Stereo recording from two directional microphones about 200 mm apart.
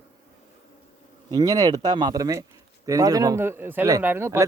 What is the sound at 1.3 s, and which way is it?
Speech, 20° right (ahead or behind).